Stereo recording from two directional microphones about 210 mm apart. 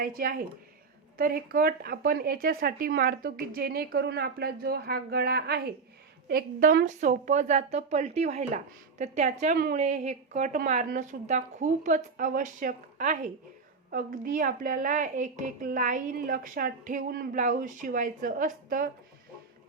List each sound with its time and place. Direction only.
0.0 s a woman's voice: 40° right (ahead or behind)